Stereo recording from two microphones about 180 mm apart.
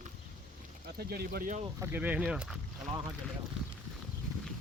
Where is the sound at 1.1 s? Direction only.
60° right (ahead or behind).